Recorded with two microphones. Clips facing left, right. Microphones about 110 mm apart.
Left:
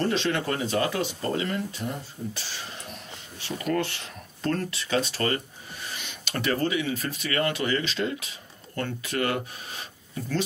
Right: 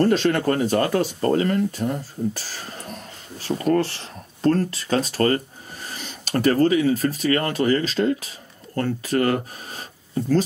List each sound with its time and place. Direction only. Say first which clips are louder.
0.0 s speech: right 7 dB; 45° right (ahead or behind)